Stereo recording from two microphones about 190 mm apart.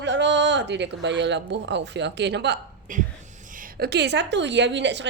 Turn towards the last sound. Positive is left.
turn(degrees=-70)  # may be behind; listen again after turning